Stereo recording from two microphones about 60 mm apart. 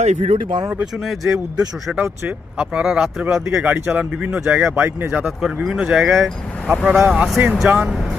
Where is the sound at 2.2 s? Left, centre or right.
Right.